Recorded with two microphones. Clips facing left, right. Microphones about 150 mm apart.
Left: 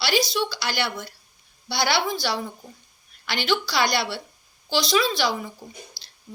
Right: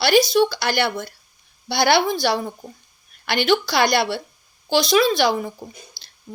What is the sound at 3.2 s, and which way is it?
A woman's voice, 55° right (ahead or behind).